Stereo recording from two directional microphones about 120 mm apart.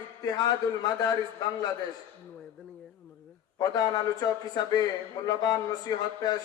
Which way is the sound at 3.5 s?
35° left (ahead or behind).